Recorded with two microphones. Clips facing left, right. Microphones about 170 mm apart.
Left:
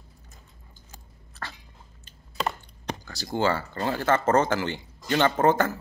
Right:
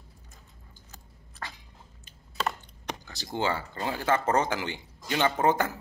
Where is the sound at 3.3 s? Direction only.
15° right (ahead or behind).